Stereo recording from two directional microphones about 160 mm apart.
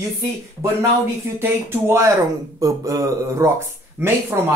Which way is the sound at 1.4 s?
15° right (ahead or behind).